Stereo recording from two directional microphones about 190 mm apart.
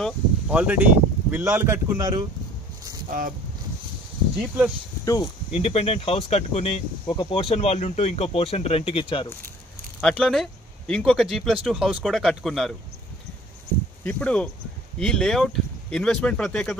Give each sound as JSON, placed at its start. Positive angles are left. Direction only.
{"t": 0.0, "sound": "speech", "side_deg": -5}
{"t": 3.1, "sound": "speech", "side_deg": -45}
{"t": 4.4, "sound": "speech", "side_deg": -5}
{"t": 5.0, "sound": "speech", "side_deg": 20}
{"t": 5.5, "sound": "speech", "side_deg": 30}
{"t": 9.9, "sound": "speech", "side_deg": 5}
{"t": 14.0, "sound": "speech", "side_deg": 5}